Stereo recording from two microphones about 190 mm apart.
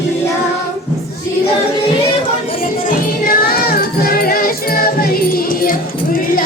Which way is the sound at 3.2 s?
50° left (ahead or behind).